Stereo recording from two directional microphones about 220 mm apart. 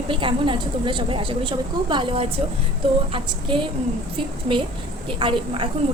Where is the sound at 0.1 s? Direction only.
25° right (ahead or behind).